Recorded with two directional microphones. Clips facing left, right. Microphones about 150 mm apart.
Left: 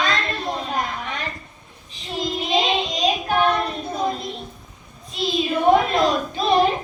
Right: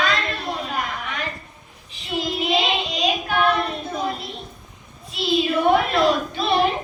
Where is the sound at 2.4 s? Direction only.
35° left (ahead or behind).